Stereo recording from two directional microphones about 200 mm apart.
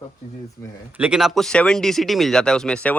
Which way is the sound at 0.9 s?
5° right (ahead or behind).